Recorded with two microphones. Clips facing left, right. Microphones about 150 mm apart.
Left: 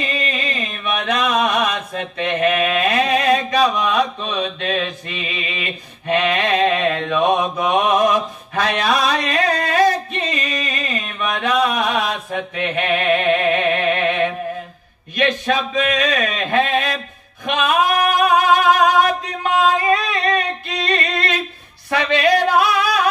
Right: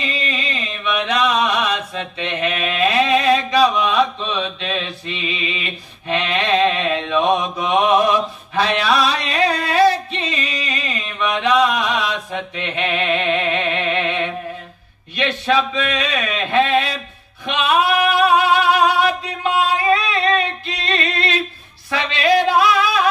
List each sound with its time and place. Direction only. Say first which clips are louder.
0.0 s chant: left 1 dB; 50° left (ahead or behind)
15.1 s a sound: even; 45° left (ahead or behind)
17.5 s singing: even; 45° left (ahead or behind)
21.9 s music: left 3 dB; 50° left (ahead or behind)